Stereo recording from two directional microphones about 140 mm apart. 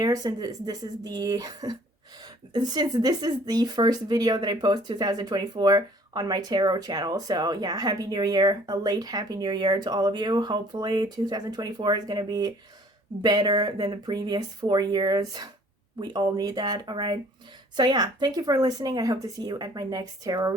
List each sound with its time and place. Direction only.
0.0 s speech: 25° right (ahead or behind)